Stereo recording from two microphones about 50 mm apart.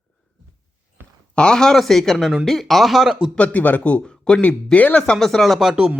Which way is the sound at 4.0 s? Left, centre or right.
Centre.